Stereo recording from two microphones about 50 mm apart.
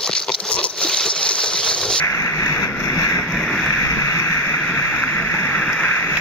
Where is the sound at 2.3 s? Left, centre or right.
Left.